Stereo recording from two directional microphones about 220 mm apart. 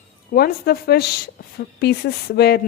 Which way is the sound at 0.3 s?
45° left (ahead or behind).